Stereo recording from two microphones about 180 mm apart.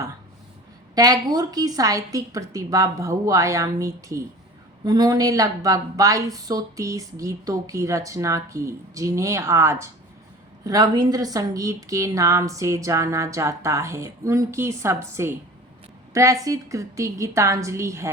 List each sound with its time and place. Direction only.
0.9 s a woman's voice: 20° right (ahead or behind)